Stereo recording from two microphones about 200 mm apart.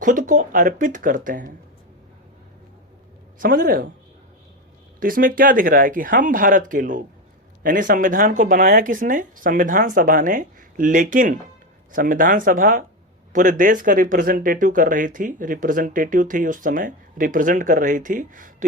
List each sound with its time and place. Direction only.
0.0 s speech: 40° right (ahead or behind)
3.4 s speech: 45° right (ahead or behind)
4.9 s speech: 45° right (ahead or behind)